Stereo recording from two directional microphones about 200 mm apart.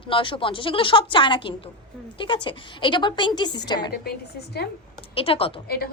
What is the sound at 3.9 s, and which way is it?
Speech, 55° left (ahead or behind).